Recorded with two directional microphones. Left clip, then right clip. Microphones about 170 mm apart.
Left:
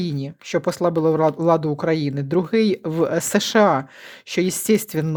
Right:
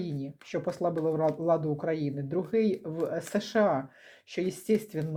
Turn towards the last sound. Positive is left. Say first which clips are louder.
# left 9 dB
turn(degrees=45)  # may be behind; listen again after turning